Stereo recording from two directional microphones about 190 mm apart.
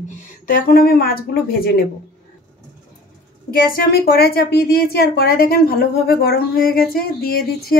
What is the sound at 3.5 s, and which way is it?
A woman's voice, 50° left (ahead or behind).